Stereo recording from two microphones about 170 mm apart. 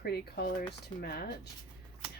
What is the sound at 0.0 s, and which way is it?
Speech, 70° left (ahead or behind).